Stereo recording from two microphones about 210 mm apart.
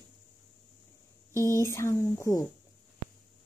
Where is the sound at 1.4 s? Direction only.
15° left (ahead or behind).